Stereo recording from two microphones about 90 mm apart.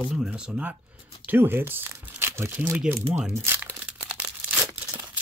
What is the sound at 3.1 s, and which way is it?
Speech, 5° right (ahead or behind).